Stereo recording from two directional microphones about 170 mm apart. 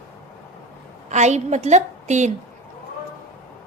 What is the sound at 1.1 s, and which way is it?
A woman's voice, 45° right (ahead or behind).